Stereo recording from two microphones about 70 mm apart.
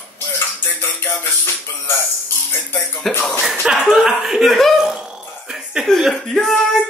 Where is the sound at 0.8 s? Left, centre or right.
Left.